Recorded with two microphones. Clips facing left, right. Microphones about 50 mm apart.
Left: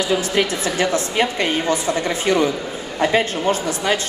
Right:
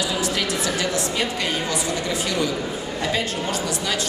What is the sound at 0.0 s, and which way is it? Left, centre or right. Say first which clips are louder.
A woman's voice: left 5 dB; left.